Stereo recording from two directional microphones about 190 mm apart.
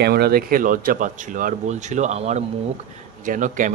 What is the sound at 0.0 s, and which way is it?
Speech, 55° right (ahead or behind).